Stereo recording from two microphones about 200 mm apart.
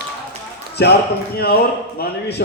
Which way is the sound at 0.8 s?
55° left (ahead or behind).